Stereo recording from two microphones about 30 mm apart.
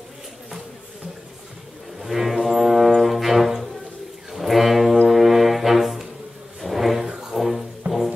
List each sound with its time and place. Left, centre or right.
2.0 s music: centre
4.3 s a sound: centre
5.0 s music: centre
6.6 s a sound: centre
7.2 s music: centre
7.8 s music: right